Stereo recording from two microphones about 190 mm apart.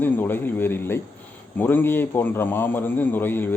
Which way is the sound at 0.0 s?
10° left (ahead or behind).